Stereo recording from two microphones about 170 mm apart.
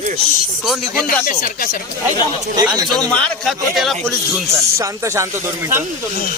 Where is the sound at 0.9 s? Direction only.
55° left (ahead or behind).